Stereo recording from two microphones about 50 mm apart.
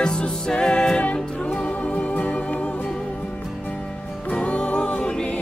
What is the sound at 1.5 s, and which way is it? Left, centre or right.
Music, left.